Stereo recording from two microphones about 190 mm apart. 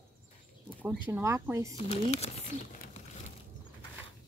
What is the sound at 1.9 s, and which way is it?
Speech, 35° left (ahead or behind).